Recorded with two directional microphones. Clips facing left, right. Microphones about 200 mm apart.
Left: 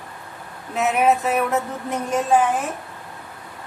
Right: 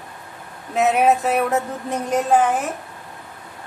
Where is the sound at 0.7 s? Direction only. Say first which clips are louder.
Right 2 dB; 35° right (ahead or behind).